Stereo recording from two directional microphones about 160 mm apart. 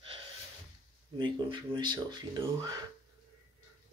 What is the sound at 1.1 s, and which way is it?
Speech, 25° right (ahead or behind).